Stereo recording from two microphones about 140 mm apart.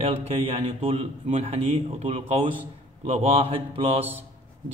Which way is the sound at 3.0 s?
45° right (ahead or behind).